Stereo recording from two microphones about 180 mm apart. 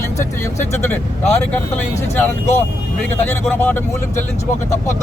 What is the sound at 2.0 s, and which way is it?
A man's voice, 15° left (ahead or behind).